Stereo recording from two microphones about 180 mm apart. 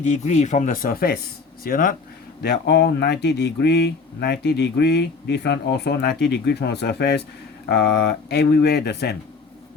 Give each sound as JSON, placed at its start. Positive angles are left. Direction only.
{"t": 0.0, "sound": "speech", "side_deg": 40}
{"t": 2.4, "sound": "speech", "side_deg": 65}